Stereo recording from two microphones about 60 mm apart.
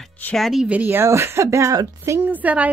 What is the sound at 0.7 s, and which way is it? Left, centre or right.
Speech, right.